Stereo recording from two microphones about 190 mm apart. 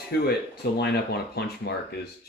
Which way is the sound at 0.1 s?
55° left (ahead or behind).